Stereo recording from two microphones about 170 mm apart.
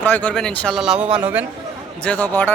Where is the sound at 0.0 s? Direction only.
10° left (ahead or behind); by 1.5 s 10° right (ahead or behind).